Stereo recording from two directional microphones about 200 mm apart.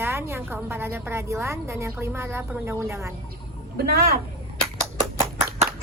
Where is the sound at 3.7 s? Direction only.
50° right (ahead or behind).